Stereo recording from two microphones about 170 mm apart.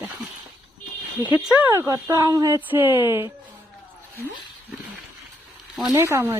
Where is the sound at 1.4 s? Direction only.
10° right (ahead or behind).